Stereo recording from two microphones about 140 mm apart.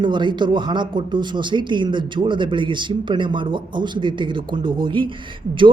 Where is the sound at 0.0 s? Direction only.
35° right (ahead or behind).